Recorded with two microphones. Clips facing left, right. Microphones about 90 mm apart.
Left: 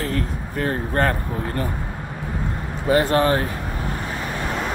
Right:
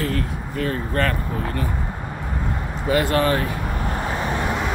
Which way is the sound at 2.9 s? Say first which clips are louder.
Left 2 dB; 30° left (ahead or behind).